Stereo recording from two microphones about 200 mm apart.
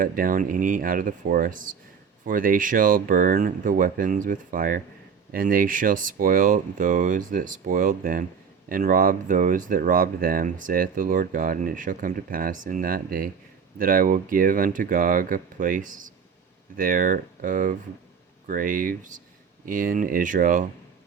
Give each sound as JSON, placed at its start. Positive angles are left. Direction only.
{"t": 0.0, "sound": "speech", "side_deg": -45}